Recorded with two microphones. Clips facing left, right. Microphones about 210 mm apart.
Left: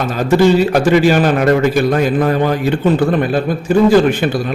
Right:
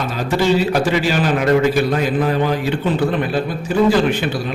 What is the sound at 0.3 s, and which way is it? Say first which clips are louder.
A man's voice: left 6 dB; 50° left (ahead or behind).